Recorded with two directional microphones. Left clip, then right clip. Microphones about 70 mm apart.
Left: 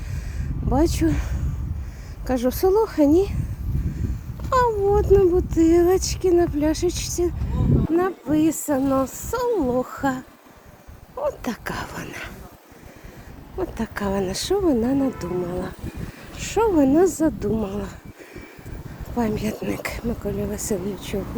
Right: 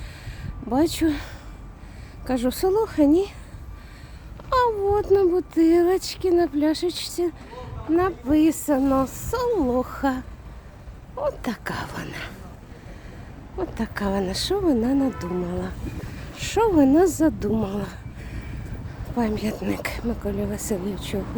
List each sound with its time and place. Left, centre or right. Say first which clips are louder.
0.7 s speech: left 1 dB; centre
2.3 s speech: left 3 dB; centre
3.1 s speech: left 2 dB; centre
4.4 s a sound: left 1 dB; centre
5.1 s speech: left 2 dB; centre
13.6 s speech: left 1 dB; centre
15.4 s speech: left 2 dB; centre
16.4 s speech: even; right
17.5 s speech: even; right
19.1 s speech: left 1 dB; centre
19.5 s speech: even; right
20.5 s speech: left 2 dB; centre
20.9 s speech: left 1 dB; centre